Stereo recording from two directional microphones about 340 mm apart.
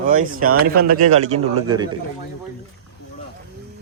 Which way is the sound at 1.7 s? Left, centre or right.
Centre.